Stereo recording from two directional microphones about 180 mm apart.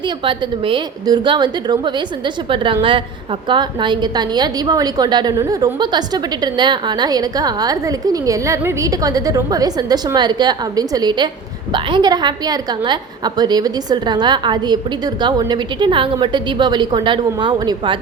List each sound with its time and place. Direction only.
0.3 s a woman's voice: 25° right (ahead or behind)